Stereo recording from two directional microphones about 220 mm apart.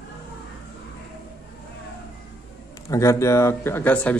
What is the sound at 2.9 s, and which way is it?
Speech, 15° left (ahead or behind).